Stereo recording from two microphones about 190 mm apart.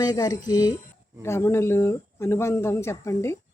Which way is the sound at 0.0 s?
20° left (ahead or behind).